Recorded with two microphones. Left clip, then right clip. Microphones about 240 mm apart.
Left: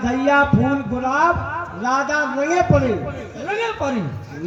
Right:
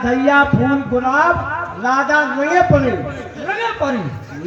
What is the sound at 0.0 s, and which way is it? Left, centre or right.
Music, left.